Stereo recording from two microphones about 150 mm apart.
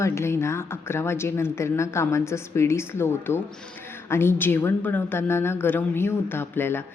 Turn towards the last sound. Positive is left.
turn(degrees=15)  # may be behind; listen again after turning